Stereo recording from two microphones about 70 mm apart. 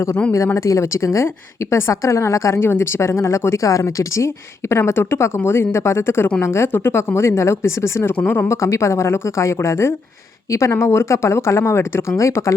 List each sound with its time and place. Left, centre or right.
0.3 s a woman's voice: left
8.1 s speech: left
8.4 s a woman's voice: left